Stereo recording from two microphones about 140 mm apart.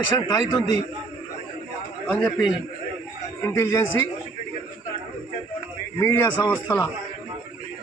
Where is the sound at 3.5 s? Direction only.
20° left (ahead or behind).